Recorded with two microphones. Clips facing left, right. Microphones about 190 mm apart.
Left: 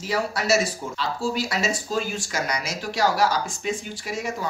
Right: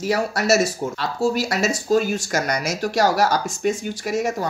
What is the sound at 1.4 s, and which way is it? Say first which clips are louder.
Speech: right 4 dB; 40° right (ahead or behind).